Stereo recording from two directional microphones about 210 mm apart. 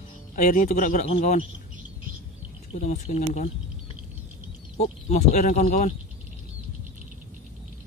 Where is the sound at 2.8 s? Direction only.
35° left (ahead or behind).